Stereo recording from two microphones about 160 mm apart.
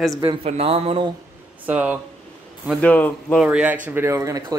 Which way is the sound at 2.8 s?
10° left (ahead or behind).